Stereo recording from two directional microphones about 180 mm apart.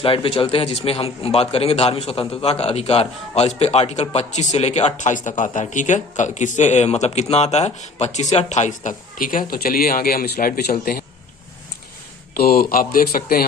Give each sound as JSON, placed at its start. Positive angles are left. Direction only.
{"t": 0.0, "sound": "a man's voice", "side_deg": 30}
{"t": 12.4, "sound": "speech", "side_deg": 55}